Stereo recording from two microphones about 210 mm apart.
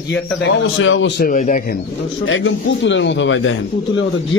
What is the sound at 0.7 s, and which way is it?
Speech, 65° left (ahead or behind).